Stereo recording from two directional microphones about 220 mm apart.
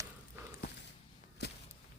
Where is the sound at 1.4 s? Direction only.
50° left (ahead or behind).